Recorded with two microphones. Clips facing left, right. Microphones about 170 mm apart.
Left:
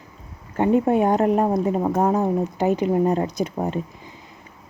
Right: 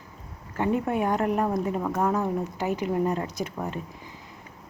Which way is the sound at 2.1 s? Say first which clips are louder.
Left 6 dB; 20° left (ahead or behind).